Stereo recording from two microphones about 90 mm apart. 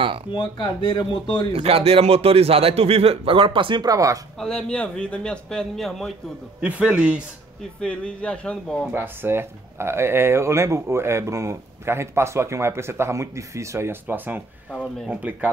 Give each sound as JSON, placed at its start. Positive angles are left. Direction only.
{"t": 0.3, "sound": "speech", "side_deg": 65}
{"t": 1.5, "sound": "a man's voice", "side_deg": -90}
{"t": 3.8, "sound": "speech", "side_deg": -40}
{"t": 4.4, "sound": "a man's voice", "side_deg": 10}
{"t": 6.6, "sound": "a man's voice", "side_deg": -15}
{"t": 7.8, "sound": "a man's voice", "side_deg": 10}
{"t": 8.9, "sound": "speech", "side_deg": -25}
{"t": 14.0, "sound": "speech", "side_deg": -20}
{"t": 14.7, "sound": "a man's voice", "side_deg": 10}
{"t": 15.0, "sound": "speech", "side_deg": -20}